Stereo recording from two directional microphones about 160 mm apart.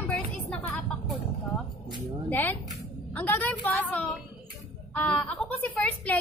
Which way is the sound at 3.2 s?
10° left (ahead or behind).